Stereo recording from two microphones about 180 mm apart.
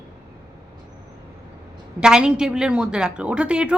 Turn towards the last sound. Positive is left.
turn(degrees=-5)  # may be behind; listen again after turning